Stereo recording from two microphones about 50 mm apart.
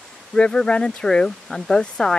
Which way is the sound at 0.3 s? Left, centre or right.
Centre.